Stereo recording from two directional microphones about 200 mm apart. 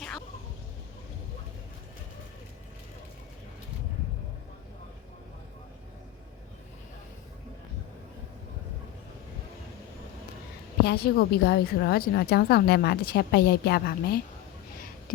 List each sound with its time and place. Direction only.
10.8 s a woman's voice: 50° left (ahead or behind)